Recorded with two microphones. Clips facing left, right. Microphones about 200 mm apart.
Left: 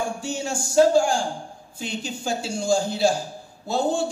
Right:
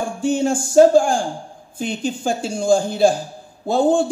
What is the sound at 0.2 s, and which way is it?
A man's voice, 55° right (ahead or behind).